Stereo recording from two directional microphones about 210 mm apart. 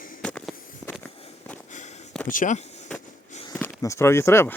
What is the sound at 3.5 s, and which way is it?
Speech, 10° left (ahead or behind).